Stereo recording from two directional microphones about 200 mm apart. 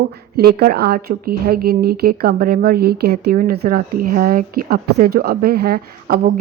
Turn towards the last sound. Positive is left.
turn(degrees=-50)  # may be behind; listen again after turning